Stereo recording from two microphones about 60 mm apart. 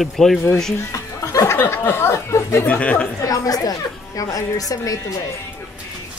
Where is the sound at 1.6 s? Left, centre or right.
Left.